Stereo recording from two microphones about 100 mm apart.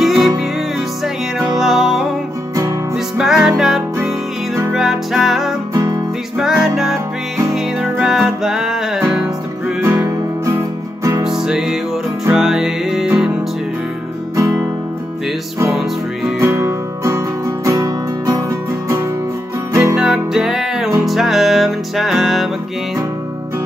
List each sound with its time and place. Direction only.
0.0 s music: centre (ahead or behind)
1.6 s music: 5° right (ahead or behind)
3.2 s music: 5° right (ahead or behind)
9.8 s music: 30° right (ahead or behind)
11.2 s music: 5° right (ahead or behind)
14.3 s music: 30° right (ahead or behind)
15.7 s music: centre (ahead or behind)
16.3 s music: 30° right (ahead or behind)
19.7 s music: 30° right (ahead or behind)
20.0 s music: 5° right (ahead or behind)